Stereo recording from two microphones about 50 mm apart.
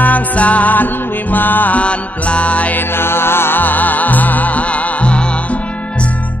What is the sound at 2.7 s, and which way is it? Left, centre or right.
Music, left.